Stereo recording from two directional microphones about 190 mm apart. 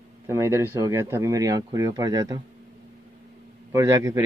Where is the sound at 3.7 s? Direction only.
15° right (ahead or behind).